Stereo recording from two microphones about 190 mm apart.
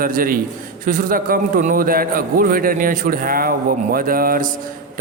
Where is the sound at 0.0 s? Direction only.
50° right (ahead or behind).